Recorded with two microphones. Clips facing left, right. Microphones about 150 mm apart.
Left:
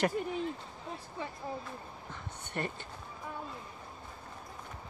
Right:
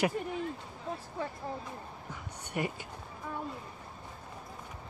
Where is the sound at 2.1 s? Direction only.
10° right (ahead or behind).